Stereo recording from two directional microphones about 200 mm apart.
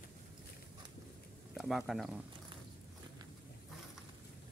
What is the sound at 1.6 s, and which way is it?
Speech, centre (ahead or behind).